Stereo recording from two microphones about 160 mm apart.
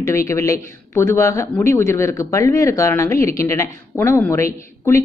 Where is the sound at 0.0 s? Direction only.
20° left (ahead or behind).